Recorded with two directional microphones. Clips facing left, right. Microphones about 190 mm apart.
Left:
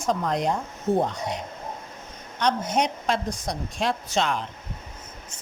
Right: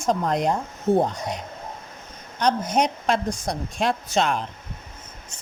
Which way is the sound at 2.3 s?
40° right (ahead or behind).